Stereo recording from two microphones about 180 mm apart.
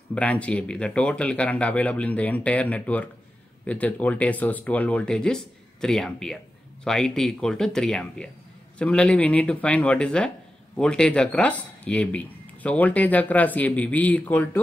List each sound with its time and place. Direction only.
0.1 s speech: 5° left (ahead or behind)